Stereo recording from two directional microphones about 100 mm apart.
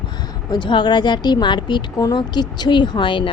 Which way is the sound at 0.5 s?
50° left (ahead or behind).